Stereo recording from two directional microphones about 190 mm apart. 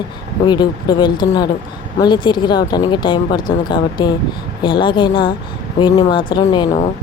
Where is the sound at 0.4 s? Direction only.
20° left (ahead or behind).